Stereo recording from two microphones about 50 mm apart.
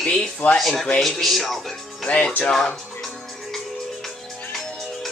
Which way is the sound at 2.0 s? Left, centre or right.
Centre.